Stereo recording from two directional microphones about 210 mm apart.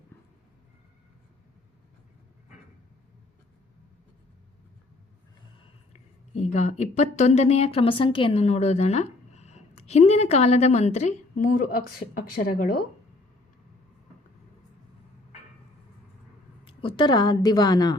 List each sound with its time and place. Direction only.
6.3 s a woman's voice: 30° left (ahead or behind)
16.6 s a woman's voice: 25° left (ahead or behind)